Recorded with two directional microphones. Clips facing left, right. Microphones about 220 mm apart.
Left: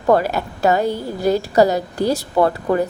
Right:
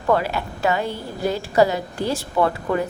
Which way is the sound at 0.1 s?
40° left (ahead or behind).